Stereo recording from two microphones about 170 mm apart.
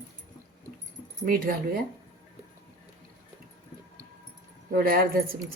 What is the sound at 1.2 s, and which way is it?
Speech, 60° right (ahead or behind).